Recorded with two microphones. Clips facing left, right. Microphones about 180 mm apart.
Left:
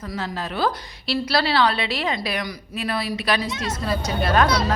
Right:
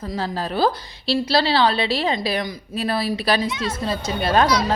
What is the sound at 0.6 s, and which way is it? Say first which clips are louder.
A woman's voice: right 3 dB; 30° right (ahead or behind).